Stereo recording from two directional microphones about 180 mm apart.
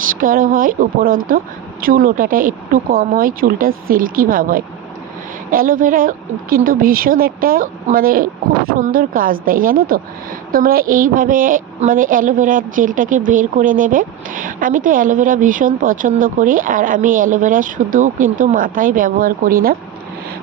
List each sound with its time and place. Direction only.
0.2 s a woman's voice: 50° right (ahead or behind)